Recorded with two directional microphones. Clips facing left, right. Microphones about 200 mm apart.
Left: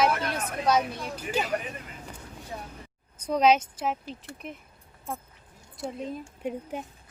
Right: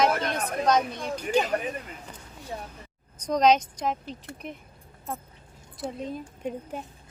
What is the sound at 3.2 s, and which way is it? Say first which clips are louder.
Speech: right 1 dB; 5° left (ahead or behind).